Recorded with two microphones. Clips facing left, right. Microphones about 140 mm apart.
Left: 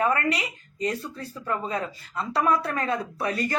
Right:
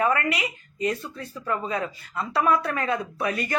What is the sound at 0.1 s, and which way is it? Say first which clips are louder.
Speech: even; 35° left (ahead or behind).